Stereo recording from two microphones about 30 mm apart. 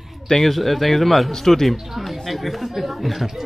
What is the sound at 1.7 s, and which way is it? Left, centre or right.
Speech, centre.